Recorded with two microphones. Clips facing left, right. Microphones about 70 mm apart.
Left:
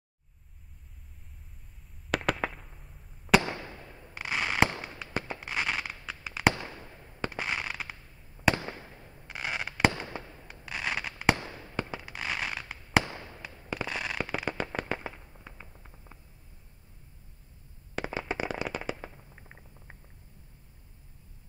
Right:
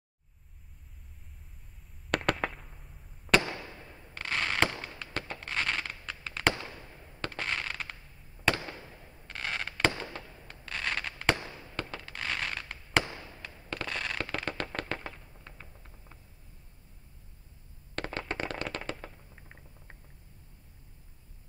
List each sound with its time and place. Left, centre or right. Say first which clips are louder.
2.0 s fireworks: even; centre
8.4 s fireworks: left 3 dB; left
9.3 s fireworks: left 1 dB; centre
17.9 s firecracker: left 2 dB; centre